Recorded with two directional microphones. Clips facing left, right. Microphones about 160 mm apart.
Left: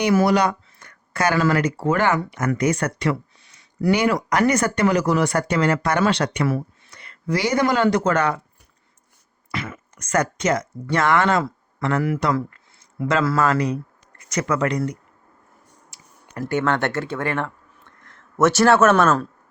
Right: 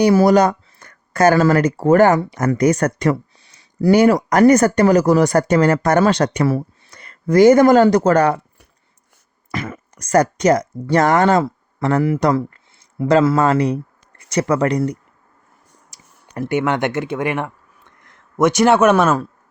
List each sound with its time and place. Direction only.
0.0 s speech: 35° right (ahead or behind)
9.5 s speech: 40° right (ahead or behind)
15.9 s a sound: 40° right (ahead or behind)
16.4 s speech: 15° right (ahead or behind)